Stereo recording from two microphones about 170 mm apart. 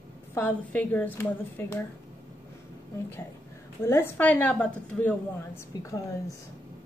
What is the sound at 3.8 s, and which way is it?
A woman's voice, 15° left (ahead or behind).